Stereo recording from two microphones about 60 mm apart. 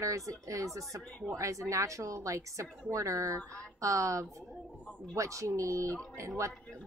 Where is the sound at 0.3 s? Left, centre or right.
Right.